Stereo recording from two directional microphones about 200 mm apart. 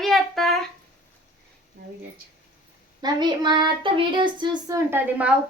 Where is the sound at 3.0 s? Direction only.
20° right (ahead or behind).